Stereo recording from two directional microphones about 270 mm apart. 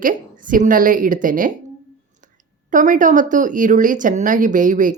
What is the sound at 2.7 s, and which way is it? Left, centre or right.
A woman's voice, right.